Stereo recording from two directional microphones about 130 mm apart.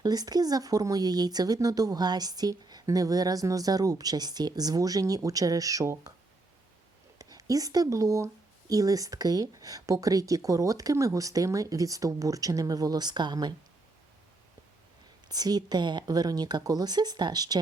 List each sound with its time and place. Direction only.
0.0 s speech: 30° right (ahead or behind)
7.2 s speech: 25° right (ahead or behind)
15.3 s speech: 30° right (ahead or behind)